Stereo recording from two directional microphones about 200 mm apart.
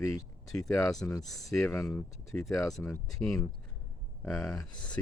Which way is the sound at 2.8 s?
15° left (ahead or behind).